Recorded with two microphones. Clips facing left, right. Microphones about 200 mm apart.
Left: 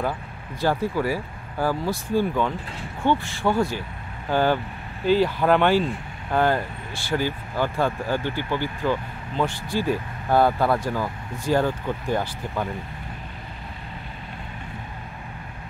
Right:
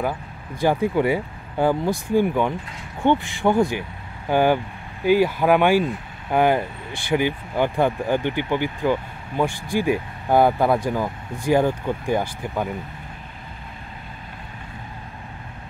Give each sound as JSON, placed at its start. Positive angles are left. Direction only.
{"t": 0.6, "sound": "speech", "side_deg": -20}